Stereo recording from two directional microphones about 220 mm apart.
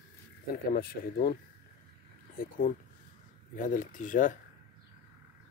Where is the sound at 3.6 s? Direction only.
35° left (ahead or behind).